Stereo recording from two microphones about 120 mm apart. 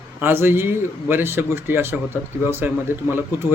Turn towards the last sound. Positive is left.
turn(degrees=-20)  # may be behind; listen again after turning